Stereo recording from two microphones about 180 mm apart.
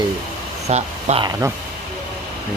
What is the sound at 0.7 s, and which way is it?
Speech, 40° right (ahead or behind).